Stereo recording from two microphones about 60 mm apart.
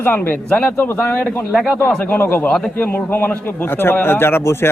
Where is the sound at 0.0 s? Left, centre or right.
Left.